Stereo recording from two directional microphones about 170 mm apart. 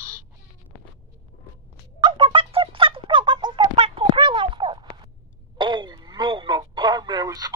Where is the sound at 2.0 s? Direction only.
30° right (ahead or behind).